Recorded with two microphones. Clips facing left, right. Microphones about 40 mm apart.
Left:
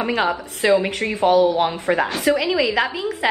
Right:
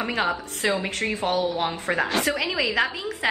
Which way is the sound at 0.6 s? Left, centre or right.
Left.